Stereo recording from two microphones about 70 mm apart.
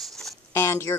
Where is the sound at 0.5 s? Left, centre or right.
Left.